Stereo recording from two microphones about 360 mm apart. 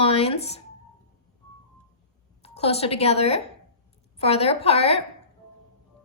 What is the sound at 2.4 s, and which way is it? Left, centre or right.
A woman's voice, centre.